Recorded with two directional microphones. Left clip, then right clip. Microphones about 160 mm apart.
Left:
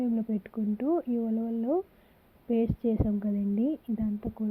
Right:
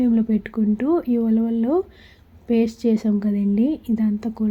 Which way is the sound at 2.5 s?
40° left (ahead or behind).